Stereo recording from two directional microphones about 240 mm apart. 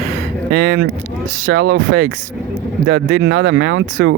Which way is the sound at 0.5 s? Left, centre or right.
Right.